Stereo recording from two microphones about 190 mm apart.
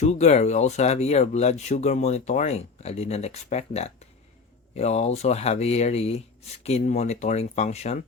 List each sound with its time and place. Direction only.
0.0 s speech: 35° left (ahead or behind)